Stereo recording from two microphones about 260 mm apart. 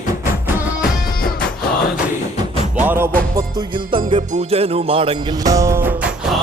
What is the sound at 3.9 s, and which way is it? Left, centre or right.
Music, centre.